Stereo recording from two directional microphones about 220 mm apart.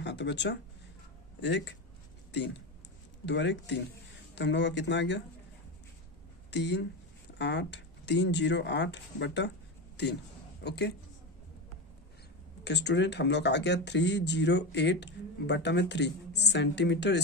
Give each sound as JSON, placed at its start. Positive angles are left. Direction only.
{"t": 0.0, "sound": "speech", "side_deg": 55}
{"t": 3.3, "sound": "speech", "side_deg": 55}
{"t": 6.5, "sound": "a woman's voice", "side_deg": 50}
{"t": 12.6, "sound": "speech", "side_deg": 50}